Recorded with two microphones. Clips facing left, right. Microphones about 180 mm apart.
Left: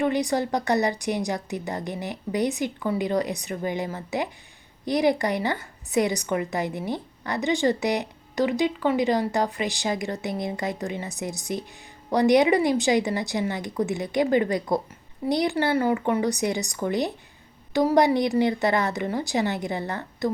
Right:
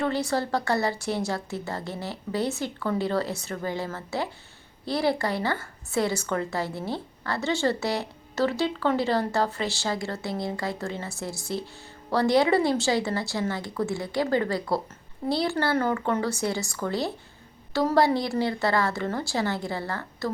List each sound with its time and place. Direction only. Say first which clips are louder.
0.0 s a woman's voice: left 3 dB; 15° left (ahead or behind)